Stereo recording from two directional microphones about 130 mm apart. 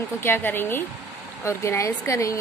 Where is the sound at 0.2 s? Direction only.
15° left (ahead or behind).